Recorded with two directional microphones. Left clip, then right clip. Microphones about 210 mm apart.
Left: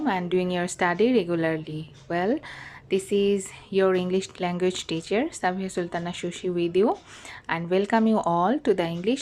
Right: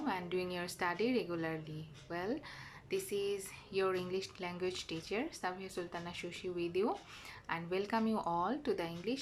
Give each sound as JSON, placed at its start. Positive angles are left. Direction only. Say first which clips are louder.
{"t": 0.0, "sound": "speech", "louder": "left 13 dB", "side_deg": 40}